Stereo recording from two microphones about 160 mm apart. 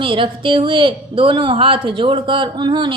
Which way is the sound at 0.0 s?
35° right (ahead or behind).